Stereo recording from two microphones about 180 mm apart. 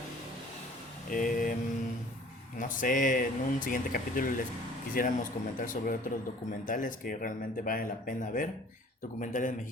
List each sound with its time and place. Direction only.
1.1 s vehicle: 50° left (ahead or behind)
2.6 s speech: 45° left (ahead or behind)